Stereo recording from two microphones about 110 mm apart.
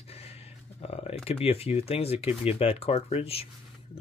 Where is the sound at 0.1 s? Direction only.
65° left (ahead or behind).